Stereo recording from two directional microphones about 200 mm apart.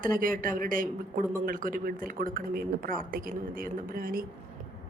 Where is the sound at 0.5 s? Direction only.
45° right (ahead or behind).